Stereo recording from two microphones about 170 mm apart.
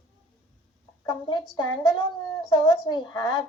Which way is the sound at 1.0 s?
25° left (ahead or behind).